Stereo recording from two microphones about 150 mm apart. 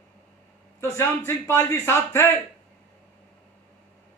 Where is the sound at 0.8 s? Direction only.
15° left (ahead or behind).